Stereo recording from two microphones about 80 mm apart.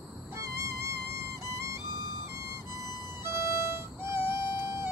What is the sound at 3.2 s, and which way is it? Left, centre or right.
Music, right.